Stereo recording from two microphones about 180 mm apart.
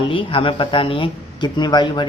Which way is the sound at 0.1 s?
30° left (ahead or behind).